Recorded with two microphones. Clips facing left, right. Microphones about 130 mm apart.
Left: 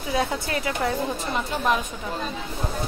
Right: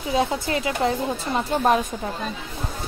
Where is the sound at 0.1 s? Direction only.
25° right (ahead or behind).